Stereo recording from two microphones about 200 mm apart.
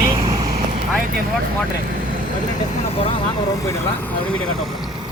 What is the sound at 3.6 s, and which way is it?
Speech, 10° left (ahead or behind).